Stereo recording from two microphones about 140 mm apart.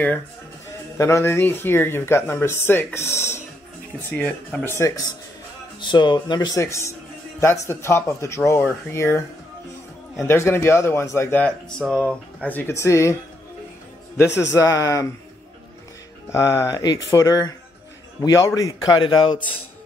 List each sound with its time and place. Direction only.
0.9 s speech: 20° left (ahead or behind)
4.7 s speech: 20° left (ahead or behind)
5.8 s speech: 35° left (ahead or behind)
6.6 s music: 20° left (ahead or behind)
7.6 s speech: 20° left (ahead or behind)
10.2 s speech: 15° left (ahead or behind)
14.1 s speech: 20° left (ahead or behind)
16.3 s speech: 20° left (ahead or behind)
18.9 s speech: 35° left (ahead or behind)